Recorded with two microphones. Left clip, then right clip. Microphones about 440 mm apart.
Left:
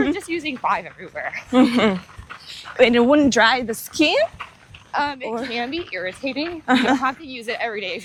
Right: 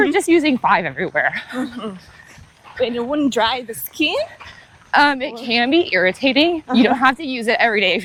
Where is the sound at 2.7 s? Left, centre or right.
Left.